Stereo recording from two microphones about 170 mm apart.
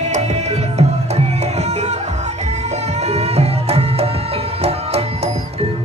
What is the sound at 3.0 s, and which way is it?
Music, 40° right (ahead or behind).